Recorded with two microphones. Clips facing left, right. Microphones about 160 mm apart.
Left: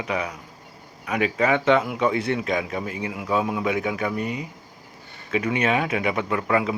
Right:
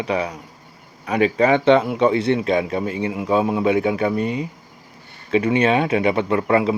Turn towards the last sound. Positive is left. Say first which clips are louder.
# right 5 dB
turn(degrees=-30)  # may be behind; listen again after turning